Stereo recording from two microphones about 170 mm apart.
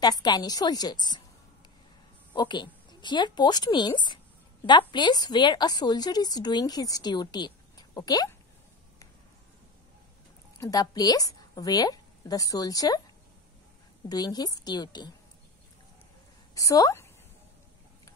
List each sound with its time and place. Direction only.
0.0 s a woman's voice: 25° left (ahead or behind)
2.3 s a woman's voice: 25° left (ahead or behind)
10.6 s a woman's voice: 20° left (ahead or behind)
14.0 s a woman's voice: 25° left (ahead or behind)
16.5 s a woman's voice: 20° left (ahead or behind)